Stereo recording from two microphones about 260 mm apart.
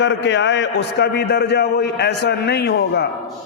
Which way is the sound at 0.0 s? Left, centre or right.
Left.